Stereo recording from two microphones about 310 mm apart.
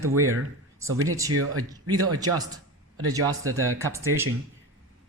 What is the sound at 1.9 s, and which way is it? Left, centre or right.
Speech, right.